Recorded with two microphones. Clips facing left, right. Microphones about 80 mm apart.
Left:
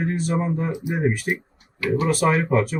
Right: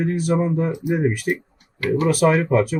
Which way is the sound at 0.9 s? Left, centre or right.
Left.